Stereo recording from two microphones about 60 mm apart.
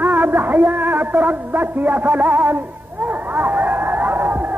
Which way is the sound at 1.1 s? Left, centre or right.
Right.